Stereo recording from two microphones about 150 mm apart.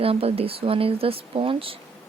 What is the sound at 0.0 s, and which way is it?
Speech, 40° right (ahead or behind).